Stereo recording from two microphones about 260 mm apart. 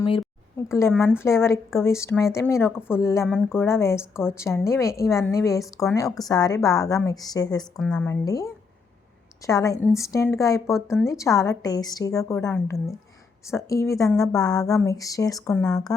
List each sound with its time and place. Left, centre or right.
0.0 s a woman's voice: centre
7.8 s a woman's voice: centre
10.7 s speech: centre
11.0 s a woman's voice: centre